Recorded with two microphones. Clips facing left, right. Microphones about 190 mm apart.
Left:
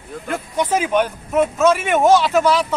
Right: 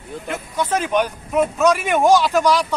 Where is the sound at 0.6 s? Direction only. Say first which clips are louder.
Left 2 dB; 10° left (ahead or behind).